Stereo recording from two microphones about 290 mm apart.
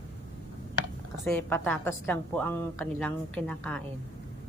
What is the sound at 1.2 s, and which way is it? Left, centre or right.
A woman's voice, centre.